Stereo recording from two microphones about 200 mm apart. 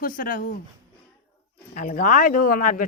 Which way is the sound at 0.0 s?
45° left (ahead or behind).